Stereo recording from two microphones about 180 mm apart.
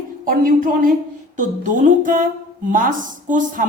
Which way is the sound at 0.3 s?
50° right (ahead or behind).